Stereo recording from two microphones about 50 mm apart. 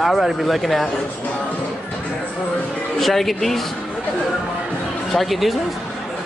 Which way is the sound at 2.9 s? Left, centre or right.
Centre.